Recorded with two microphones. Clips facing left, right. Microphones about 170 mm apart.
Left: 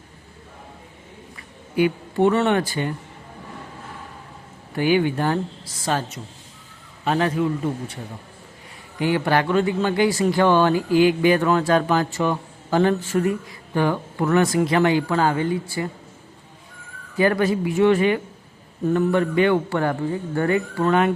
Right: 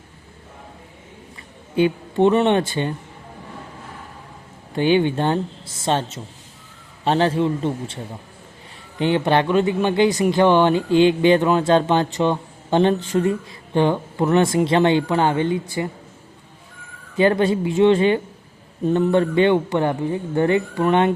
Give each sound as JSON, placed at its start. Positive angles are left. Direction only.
{"t": 1.7, "sound": "speech", "side_deg": -25}
{"t": 4.7, "sound": "speech", "side_deg": -25}
{"t": 9.0, "sound": "speech", "side_deg": -25}
{"t": 17.2, "sound": "speech", "side_deg": -25}